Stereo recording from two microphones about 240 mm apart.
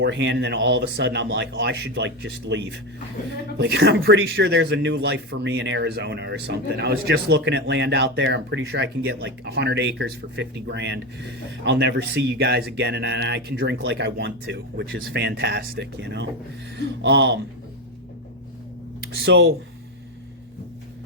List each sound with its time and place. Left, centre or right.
0.0 s speech: right
19.2 s speech: right